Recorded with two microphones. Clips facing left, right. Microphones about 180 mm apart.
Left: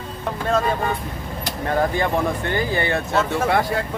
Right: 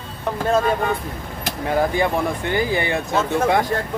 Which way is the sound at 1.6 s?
10° right (ahead or behind).